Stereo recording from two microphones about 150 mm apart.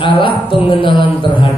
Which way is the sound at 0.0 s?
35° left (ahead or behind).